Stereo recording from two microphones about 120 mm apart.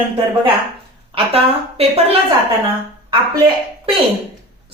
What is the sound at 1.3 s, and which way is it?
Speech, 55° right (ahead or behind).